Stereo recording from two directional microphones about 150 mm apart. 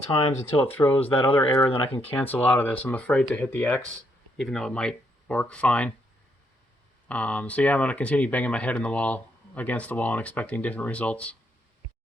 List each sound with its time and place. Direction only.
0.2 s speech: 40° left (ahead or behind)
0.7 s speech: 10° left (ahead or behind)
1.7 s speech: 40° left (ahead or behind)
2.0 s speech: 10° left (ahead or behind)
7.1 s speech: 10° left (ahead or behind)